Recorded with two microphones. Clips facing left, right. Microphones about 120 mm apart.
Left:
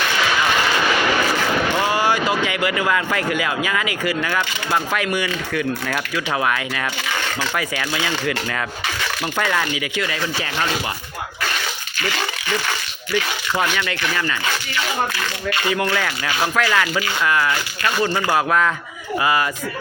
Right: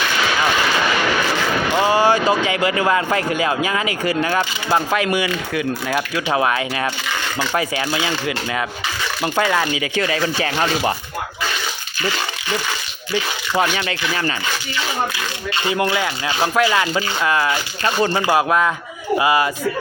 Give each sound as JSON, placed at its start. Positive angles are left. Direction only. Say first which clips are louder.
{"t": 1.8, "sound": "speech", "louder": "right 4 dB", "side_deg": -20}
{"t": 9.2, "sound": "speech", "louder": "right 4 dB", "side_deg": -25}
{"t": 13.1, "sound": "speech", "louder": "right 2 dB", "side_deg": -25}
{"t": 15.5, "sound": "speech", "louder": "right 2 dB", "side_deg": -25}